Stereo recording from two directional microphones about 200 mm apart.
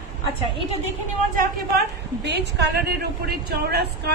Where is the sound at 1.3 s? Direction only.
55° right (ahead or behind).